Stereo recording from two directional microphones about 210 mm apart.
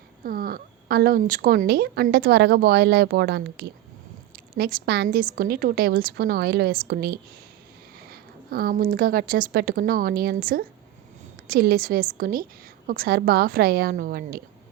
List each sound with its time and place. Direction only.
0.3 s a woman's voice: 45° right (ahead or behind)